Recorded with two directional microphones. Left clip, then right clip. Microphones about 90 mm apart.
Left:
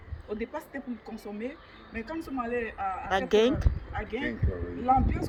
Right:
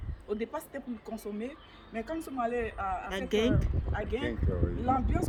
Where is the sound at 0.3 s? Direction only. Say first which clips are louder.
Left 2 dB; 45° right (ahead or behind).